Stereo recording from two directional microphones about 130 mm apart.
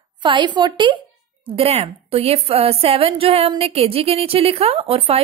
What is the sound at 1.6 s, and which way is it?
A woman's voice, 50° right (ahead or behind).